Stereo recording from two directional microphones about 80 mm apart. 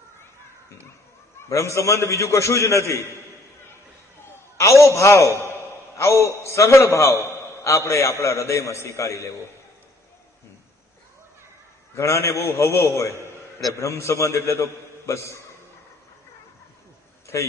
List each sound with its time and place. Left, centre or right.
1.5 s a man's voice: left
4.2 s a man's voice: left
11.9 s a man's voice: left
17.3 s a man's voice: left